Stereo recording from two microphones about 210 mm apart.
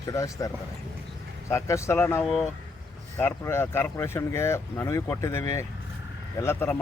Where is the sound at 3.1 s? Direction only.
10° left (ahead or behind).